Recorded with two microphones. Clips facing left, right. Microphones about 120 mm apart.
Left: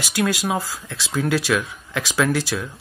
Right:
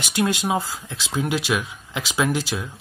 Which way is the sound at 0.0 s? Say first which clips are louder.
Even; 25° right (ahead or behind).